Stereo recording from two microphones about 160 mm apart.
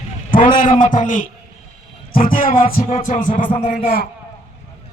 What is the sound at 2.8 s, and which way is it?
Music, 50° left (ahead or behind).